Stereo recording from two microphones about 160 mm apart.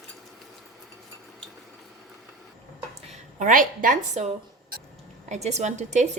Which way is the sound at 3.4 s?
55° right (ahead or behind).